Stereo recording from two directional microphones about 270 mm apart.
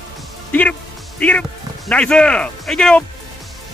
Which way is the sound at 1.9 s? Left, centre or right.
Centre.